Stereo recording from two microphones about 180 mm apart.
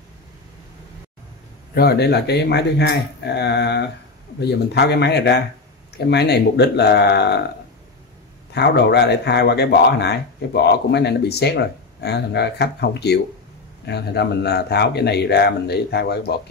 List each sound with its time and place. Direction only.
1.8 s speech: 65° left (ahead or behind)
8.5 s speech: 65° left (ahead or behind)